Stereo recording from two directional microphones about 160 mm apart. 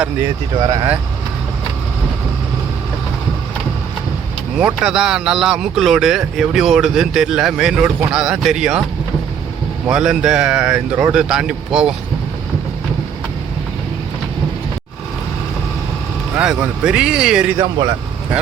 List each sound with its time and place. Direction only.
0.5 s speech: 25° right (ahead or behind)
4.6 s speech: 5° right (ahead or behind)
9.9 s speech: 5° right (ahead or behind)
16.4 s speech: 5° right (ahead or behind)
17.6 s speech: 25° right (ahead or behind)